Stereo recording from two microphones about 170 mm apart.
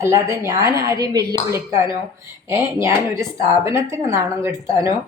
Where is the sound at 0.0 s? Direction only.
15° right (ahead or behind).